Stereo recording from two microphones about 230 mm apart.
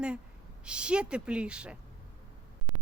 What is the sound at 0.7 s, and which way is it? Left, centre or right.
Speech, centre.